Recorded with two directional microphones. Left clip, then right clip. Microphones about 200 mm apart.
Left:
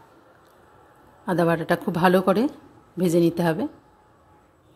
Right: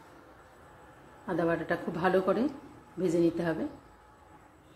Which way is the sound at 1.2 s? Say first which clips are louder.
Left 8 dB; 55° left (ahead or behind).